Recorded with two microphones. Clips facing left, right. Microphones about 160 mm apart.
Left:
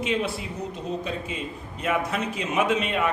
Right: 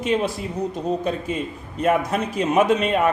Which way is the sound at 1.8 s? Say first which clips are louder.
Right 6 dB; 45° right (ahead or behind).